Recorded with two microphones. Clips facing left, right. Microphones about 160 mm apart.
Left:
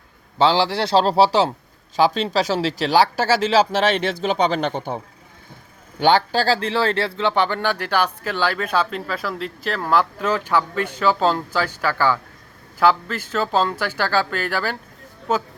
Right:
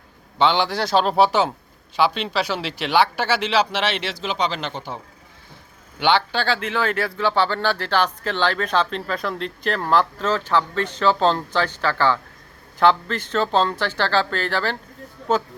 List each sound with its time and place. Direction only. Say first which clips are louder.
0.3 s a man's voice: left 2 dB; 35° left (ahead or behind); by 4.9 s 55° left (ahead or behind)
6.0 s speech: left 3 dB; 45° left (ahead or behind); by 15.4 s 5° left (ahead or behind)